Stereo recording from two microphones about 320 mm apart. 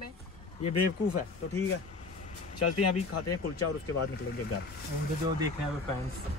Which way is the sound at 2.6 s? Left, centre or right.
Left.